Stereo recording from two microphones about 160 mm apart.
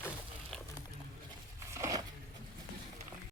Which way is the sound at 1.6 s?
15° right (ahead or behind).